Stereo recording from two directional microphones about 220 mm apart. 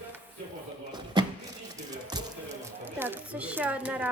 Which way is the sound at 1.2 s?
20° right (ahead or behind).